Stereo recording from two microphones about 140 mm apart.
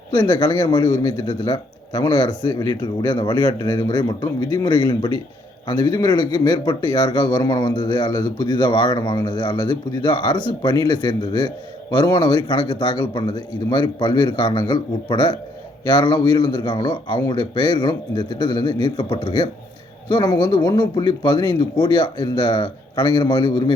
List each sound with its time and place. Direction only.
0.1 s a man's voice: 30° left (ahead or behind)